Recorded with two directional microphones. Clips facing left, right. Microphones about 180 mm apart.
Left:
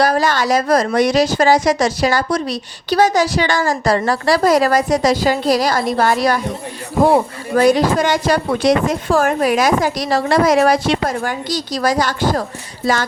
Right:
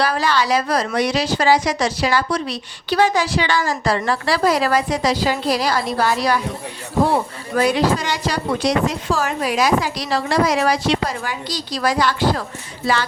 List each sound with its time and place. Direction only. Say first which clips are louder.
0.0 s a woman's voice: left 4 dB; 45° left (ahead or behind)